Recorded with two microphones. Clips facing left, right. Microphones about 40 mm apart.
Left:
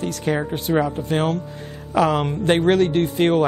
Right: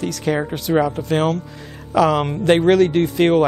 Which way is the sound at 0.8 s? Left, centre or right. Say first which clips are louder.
Right 2 dB; right.